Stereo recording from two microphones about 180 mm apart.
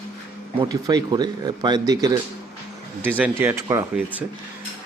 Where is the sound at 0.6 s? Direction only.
20° right (ahead or behind).